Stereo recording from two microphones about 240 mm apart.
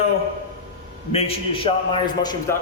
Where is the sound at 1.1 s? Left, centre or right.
Left.